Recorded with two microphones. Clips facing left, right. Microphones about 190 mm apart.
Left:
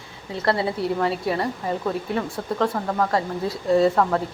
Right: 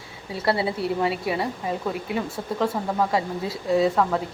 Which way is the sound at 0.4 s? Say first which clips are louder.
Left 1 dB; 5° right (ahead or behind).